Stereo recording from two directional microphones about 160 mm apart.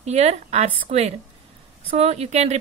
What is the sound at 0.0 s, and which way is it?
Speech, 45° right (ahead or behind).